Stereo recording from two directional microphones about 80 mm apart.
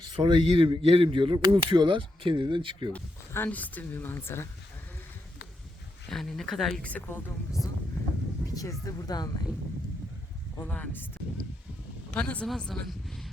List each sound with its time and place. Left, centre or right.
0.2 s speech: right
3.3 s speech: left
6.1 s speech: centre
8.5 s speech: left
10.6 s speech: left
12.1 s speech: centre